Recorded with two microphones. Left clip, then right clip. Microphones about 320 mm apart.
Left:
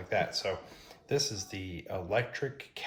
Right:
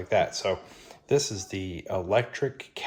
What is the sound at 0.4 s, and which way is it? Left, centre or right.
Speech, right.